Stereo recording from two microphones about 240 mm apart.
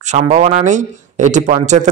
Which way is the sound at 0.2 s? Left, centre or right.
Right.